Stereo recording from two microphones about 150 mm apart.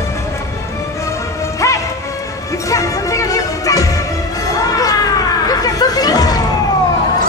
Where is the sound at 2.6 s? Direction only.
20° left (ahead or behind).